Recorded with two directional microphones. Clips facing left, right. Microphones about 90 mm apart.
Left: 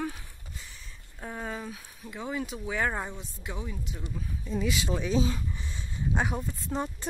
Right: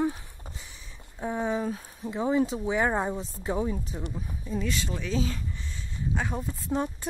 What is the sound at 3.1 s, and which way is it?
Speech, 35° right (ahead or behind).